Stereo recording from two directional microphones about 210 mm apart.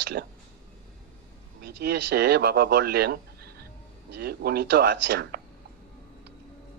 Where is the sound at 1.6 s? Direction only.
50° right (ahead or behind).